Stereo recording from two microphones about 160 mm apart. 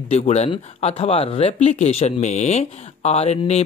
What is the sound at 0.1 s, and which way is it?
Speech, 40° left (ahead or behind).